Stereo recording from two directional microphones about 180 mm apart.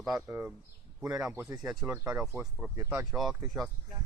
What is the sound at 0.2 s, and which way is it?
Speech, 10° right (ahead or behind).